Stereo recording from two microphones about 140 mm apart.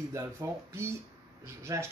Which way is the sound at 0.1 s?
20° right (ahead or behind).